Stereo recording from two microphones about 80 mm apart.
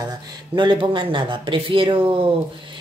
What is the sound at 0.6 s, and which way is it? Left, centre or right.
Speech, right.